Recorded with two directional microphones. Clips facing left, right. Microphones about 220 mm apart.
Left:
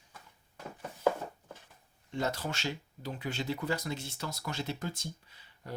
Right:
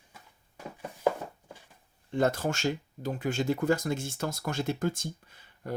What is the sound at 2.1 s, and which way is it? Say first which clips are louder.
Speech: right 7 dB; 50° right (ahead or behind).